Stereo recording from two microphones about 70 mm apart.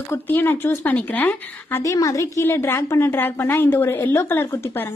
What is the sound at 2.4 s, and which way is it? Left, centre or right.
A woman's voice, left.